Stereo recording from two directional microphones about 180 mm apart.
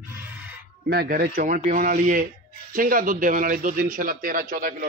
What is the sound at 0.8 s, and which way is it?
Speech, 55° right (ahead or behind).